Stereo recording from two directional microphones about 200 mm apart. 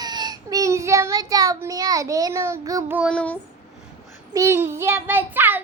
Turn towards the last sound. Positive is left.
turn(degrees=-10)  # may be behind; listen again after turning